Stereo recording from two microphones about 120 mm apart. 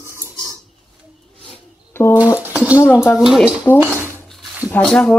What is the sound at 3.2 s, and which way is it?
Speech, centre (ahead or behind).